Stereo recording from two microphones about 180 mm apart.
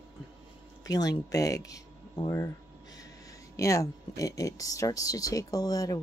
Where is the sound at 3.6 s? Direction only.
15° left (ahead or behind).